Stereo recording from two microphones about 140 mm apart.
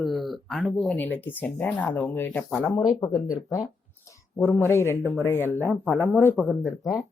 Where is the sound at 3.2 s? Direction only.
5° right (ahead or behind).